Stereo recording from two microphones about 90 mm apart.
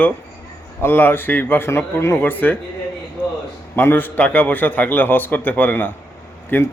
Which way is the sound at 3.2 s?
25° left (ahead or behind).